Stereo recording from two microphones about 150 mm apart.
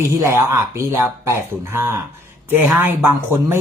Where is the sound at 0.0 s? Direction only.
15° right (ahead or behind).